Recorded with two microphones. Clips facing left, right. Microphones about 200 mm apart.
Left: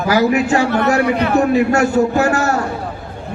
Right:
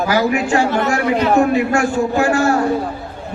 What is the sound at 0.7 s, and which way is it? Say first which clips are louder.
Speech: left 2 dB; 60° left (ahead or behind).